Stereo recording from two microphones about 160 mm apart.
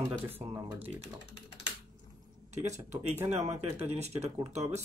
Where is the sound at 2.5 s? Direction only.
45° right (ahead or behind).